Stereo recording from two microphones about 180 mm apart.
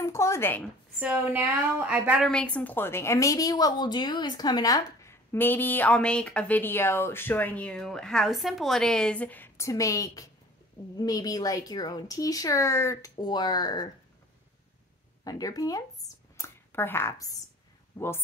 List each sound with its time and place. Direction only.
0.0 s a sound: 15° left (ahead or behind)
0.9 s a woman's voice: 5° right (ahead or behind)
2.3 s a woman's voice: 10° left (ahead or behind)
15.2 s speech: 20° left (ahead or behind)